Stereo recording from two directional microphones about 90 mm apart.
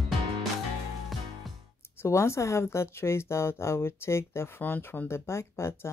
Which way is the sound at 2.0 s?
30° left (ahead or behind).